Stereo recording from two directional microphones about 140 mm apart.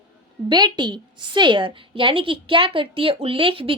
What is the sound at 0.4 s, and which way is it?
A woman's voice, 30° right (ahead or behind).